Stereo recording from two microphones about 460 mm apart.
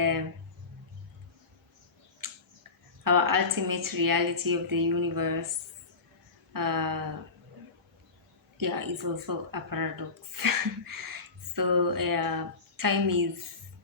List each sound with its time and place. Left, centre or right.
2.2 s tick-tock: right
3.0 s speech: right
6.5 s speech: right
8.5 s speech: right